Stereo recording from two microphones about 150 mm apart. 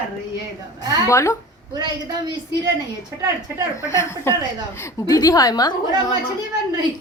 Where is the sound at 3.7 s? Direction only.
20° left (ahead or behind).